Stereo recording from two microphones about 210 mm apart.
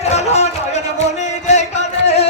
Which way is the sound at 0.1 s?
30° left (ahead or behind).